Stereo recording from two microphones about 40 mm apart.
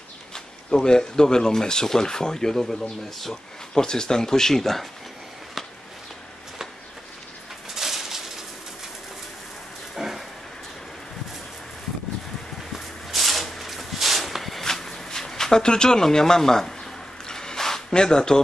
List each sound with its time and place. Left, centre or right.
0.3 s speech: centre
7.7 s bird: centre
9.9 s dog: centre
12.7 s a sound: centre